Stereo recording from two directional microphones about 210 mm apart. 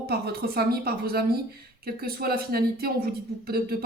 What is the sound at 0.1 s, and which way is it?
Speech, 50° right (ahead or behind).